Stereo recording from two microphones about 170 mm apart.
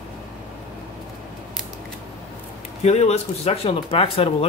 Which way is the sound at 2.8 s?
40° left (ahead or behind).